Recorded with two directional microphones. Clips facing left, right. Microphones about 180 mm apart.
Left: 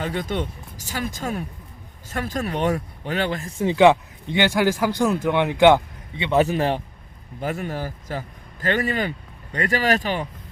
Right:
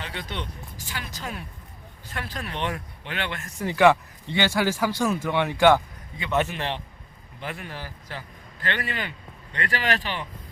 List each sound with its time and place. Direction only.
0.0 s speech: 45° left (ahead or behind)